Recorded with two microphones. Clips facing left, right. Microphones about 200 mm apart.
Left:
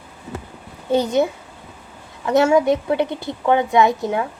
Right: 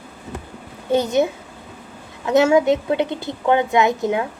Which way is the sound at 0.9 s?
20° right (ahead or behind).